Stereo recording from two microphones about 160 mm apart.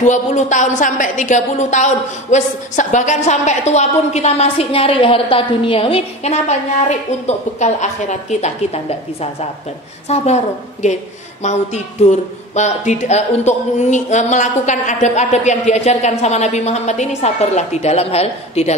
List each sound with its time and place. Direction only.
0.0 s speech: 50° left (ahead or behind)